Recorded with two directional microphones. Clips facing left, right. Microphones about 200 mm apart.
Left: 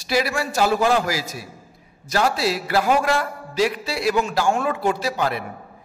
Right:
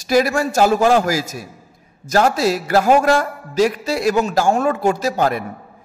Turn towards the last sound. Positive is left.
turn(degrees=-45)  # may be behind; listen again after turning